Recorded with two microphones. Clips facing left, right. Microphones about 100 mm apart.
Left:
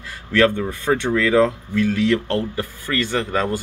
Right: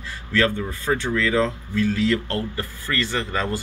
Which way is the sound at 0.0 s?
60° left (ahead or behind).